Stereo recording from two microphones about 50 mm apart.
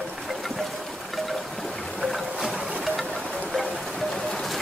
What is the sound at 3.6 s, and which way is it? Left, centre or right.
Rain, centre.